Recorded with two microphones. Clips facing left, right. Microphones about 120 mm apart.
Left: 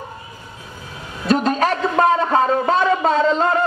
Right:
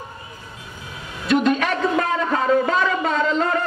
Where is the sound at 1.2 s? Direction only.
35° left (ahead or behind).